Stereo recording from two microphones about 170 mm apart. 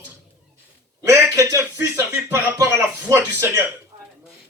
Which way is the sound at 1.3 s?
20° right (ahead or behind).